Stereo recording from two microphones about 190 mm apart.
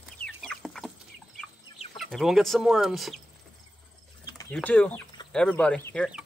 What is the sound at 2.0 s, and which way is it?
Speech, centre (ahead or behind).